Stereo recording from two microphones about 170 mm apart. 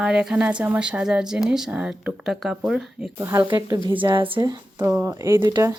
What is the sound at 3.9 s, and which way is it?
Speech, 30° right (ahead or behind).